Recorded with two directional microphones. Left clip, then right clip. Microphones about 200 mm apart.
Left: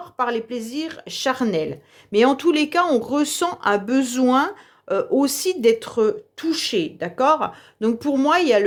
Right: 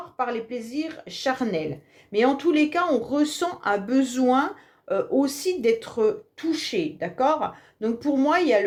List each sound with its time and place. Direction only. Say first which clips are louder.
0.2 s speech: left 5 dB; 40° left (ahead or behind)